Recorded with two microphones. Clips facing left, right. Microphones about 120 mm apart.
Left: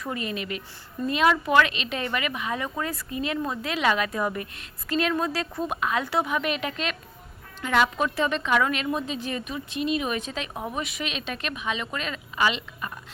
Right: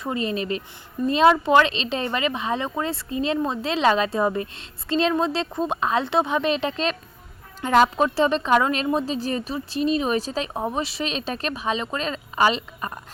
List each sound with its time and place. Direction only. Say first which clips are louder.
0.0 s a woman's voice: right 5 dB; 30° right (ahead or behind)